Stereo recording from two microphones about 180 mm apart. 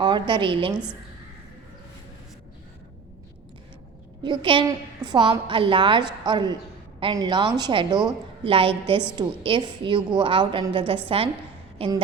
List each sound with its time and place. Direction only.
0.0 s a woman's voice: 25° right (ahead or behind)
4.2 s a woman's voice: 25° right (ahead or behind)